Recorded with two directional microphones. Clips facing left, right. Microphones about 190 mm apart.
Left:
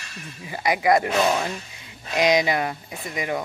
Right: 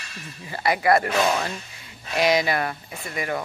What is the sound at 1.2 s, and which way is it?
Speech, 5° left (ahead or behind).